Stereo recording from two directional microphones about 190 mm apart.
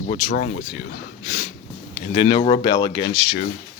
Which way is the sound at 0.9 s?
60° left (ahead or behind).